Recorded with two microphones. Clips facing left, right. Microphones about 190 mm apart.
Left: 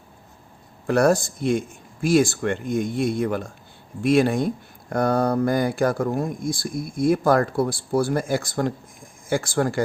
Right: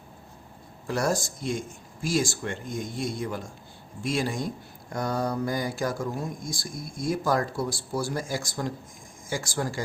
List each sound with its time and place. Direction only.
0.9 s speech: 60° left (ahead or behind)